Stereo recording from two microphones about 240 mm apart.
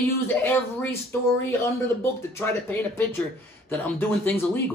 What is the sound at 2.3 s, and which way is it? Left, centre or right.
Speech, centre.